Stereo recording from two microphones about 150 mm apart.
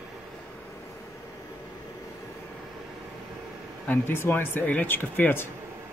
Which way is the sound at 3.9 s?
15° left (ahead or behind).